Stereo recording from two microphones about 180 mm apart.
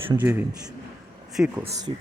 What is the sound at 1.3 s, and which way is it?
Speech, 5° right (ahead or behind).